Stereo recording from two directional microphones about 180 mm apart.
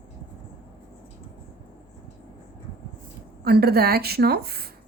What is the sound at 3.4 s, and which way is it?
A woman's voice, 60° right (ahead or behind).